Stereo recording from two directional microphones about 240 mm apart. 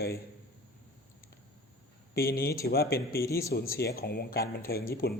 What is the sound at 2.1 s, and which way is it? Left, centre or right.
Speech, left.